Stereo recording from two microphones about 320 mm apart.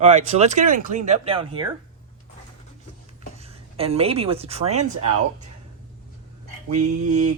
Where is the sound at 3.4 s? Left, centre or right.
Centre.